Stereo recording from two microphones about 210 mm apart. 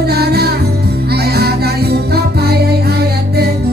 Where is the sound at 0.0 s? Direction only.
50° right (ahead or behind).